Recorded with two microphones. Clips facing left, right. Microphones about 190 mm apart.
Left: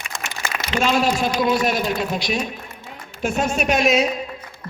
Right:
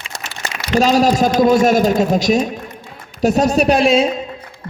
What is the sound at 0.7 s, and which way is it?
A man's voice, 40° right (ahead or behind).